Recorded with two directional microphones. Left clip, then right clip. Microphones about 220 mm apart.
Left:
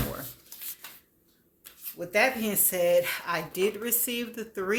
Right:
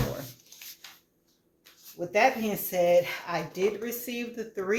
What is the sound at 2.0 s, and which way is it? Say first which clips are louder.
Speech: right 1 dB; 40° left (ahead or behind).